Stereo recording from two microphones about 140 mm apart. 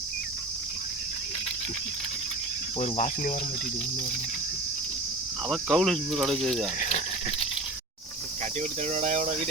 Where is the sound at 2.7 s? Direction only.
50° left (ahead or behind).